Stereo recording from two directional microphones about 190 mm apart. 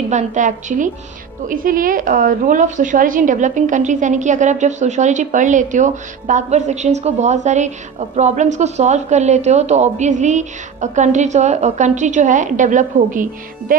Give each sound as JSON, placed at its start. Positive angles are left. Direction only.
{"t": 0.1, "sound": "a woman's voice", "side_deg": -40}